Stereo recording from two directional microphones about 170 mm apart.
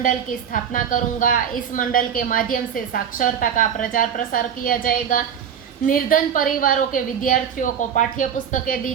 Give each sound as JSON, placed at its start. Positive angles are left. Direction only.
{"t": 0.0, "sound": "a woman's voice", "side_deg": 55}